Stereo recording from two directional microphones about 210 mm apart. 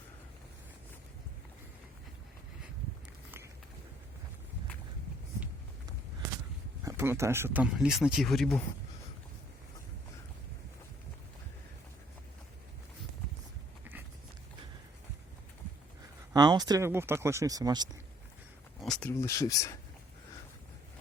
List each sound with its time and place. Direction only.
6.8 s speech: 10° right (ahead or behind)
16.3 s speech: 20° right (ahead or behind)
18.8 s speech: 5° left (ahead or behind)